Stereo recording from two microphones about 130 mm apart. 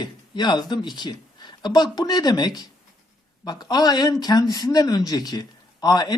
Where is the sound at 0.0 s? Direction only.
35° left (ahead or behind).